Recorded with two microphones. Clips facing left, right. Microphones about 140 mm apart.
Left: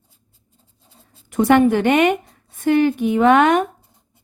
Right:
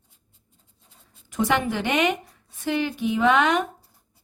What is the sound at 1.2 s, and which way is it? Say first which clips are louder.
A woman's voice: left 10 dB; 60° left (ahead or behind).